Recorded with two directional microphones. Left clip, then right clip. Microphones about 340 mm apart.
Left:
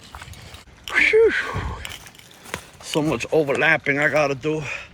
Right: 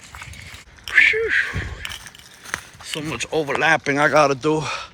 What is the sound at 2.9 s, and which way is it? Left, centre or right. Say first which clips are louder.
Speech: left 4 dB; centre.